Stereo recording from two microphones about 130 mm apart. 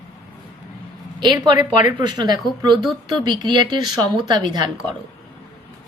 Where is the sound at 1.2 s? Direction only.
35° right (ahead or behind).